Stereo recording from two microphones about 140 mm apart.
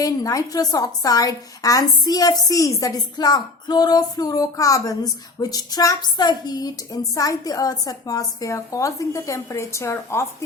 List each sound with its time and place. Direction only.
0.0 s a woman's voice: 25° left (ahead or behind)